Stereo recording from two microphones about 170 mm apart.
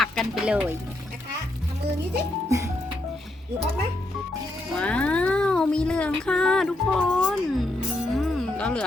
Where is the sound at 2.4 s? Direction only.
20° right (ahead or behind).